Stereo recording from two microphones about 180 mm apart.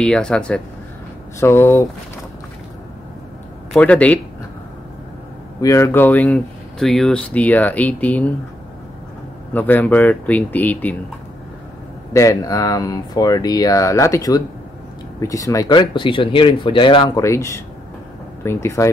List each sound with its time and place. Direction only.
0.0 s speech: 5° left (ahead or behind)
3.7 s speech: 5° left (ahead or behind)
5.6 s speech: 15° left (ahead or behind)
9.5 s speech: 10° left (ahead or behind)
12.1 s speech: 15° left (ahead or behind)